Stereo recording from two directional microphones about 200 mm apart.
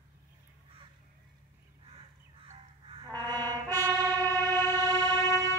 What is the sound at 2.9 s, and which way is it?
Brass instrument, 25° right (ahead or behind).